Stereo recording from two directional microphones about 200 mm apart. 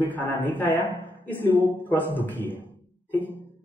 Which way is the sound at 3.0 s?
10° left (ahead or behind).